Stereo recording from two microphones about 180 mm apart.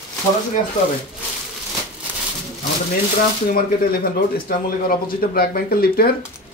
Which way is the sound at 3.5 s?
55° left (ahead or behind).